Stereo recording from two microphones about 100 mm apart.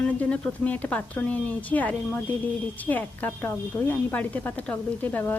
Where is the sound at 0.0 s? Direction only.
10° left (ahead or behind).